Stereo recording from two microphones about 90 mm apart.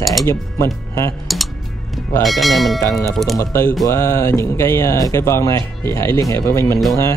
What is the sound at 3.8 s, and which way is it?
Speech, 35° left (ahead or behind).